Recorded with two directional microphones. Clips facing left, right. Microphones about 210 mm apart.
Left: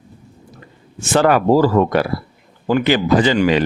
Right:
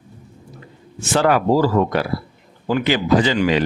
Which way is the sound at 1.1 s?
55° left (ahead or behind).